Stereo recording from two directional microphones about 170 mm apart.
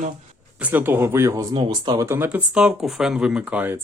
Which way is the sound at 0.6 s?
10° right (ahead or behind).